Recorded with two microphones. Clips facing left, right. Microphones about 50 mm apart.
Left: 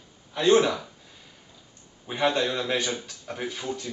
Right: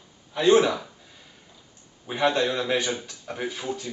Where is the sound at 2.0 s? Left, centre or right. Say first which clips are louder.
Right 2 dB; centre.